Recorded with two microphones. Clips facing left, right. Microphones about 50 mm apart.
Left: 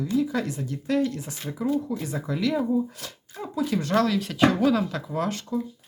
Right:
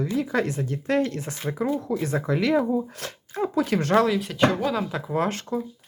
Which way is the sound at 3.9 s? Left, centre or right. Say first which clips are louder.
Right 3 dB; centre.